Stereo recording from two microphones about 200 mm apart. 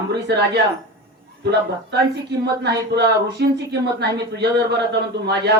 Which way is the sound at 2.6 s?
55° right (ahead or behind).